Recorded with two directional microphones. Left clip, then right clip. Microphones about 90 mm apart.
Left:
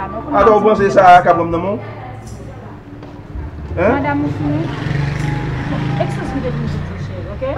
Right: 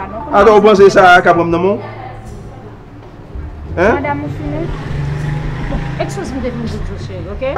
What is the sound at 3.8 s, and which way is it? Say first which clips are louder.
Speech: right 2 dB; 20° right (ahead or behind).